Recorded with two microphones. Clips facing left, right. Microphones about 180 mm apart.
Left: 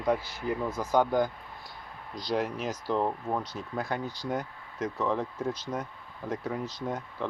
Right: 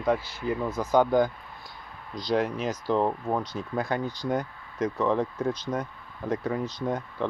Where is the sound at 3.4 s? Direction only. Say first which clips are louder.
Right 4 dB; 5° left (ahead or behind).